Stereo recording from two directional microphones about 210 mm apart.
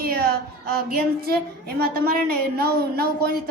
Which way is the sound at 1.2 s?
45° right (ahead or behind).